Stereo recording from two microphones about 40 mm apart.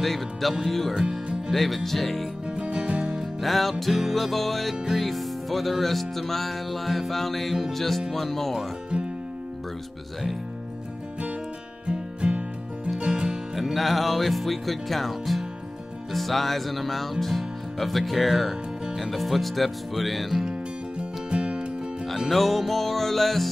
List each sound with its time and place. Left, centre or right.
0.0 s music: centre
2.4 s music: right
3.4 s music: centre
8.9 s music: right
11.8 s music: right
13.6 s music: centre
21.0 s music: right
22.3 s music: centre